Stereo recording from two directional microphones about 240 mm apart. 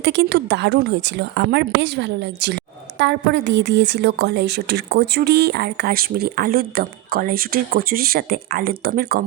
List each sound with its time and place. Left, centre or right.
0.0 s speech: right